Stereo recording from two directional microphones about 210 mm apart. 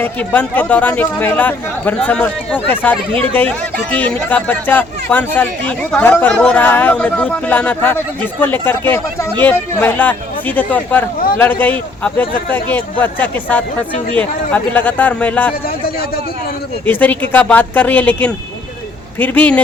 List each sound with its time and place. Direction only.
0.0 s speech: 10° left (ahead or behind)
3.1 s speech: 25° right (ahead or behind)
3.3 s speech: 10° left (ahead or behind)
16.8 s speech: 10° left (ahead or behind)